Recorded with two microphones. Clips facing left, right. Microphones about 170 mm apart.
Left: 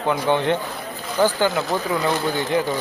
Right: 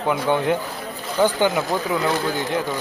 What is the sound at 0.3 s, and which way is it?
Speech, 5° right (ahead or behind).